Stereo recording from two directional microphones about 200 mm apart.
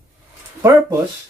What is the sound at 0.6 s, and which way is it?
Speech, 15° right (ahead or behind).